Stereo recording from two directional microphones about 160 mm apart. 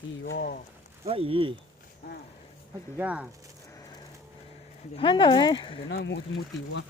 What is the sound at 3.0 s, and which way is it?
Speech, 10° right (ahead or behind).